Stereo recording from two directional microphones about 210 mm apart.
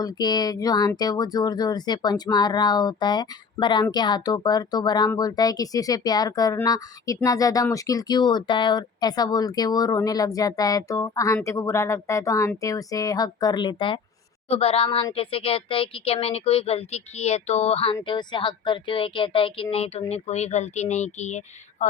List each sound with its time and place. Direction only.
0.0 s speech: 20° left (ahead or behind)